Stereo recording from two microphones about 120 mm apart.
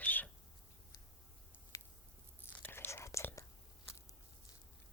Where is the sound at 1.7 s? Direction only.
30° left (ahead or behind).